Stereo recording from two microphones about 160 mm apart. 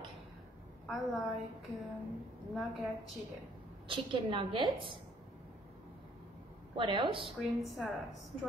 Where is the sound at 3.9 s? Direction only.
30° right (ahead or behind).